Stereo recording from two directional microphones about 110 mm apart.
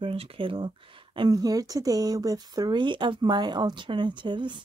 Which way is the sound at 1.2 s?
35° right (ahead or behind).